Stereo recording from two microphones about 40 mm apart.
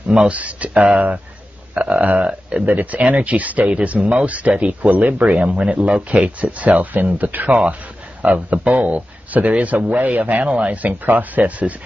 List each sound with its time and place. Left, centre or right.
0.3 s speech: right
2.6 s speech: right